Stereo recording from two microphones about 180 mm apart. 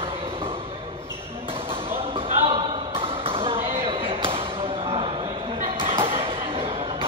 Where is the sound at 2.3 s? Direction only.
30° right (ahead or behind).